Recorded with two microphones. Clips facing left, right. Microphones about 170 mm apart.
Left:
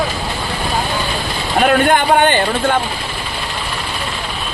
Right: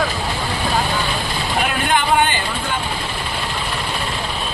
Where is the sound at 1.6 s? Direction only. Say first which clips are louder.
Left 8 dB; 55° left (ahead or behind).